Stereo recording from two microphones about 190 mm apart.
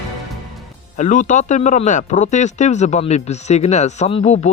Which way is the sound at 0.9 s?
40° left (ahead or behind).